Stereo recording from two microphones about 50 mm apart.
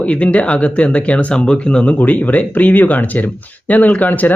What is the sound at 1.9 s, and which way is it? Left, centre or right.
Speech, left.